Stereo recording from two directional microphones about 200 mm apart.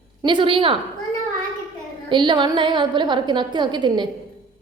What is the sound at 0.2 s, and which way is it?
Speech, 25° right (ahead or behind).